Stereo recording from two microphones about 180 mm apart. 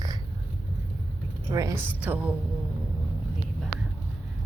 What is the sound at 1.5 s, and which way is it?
Speech, 20° right (ahead or behind).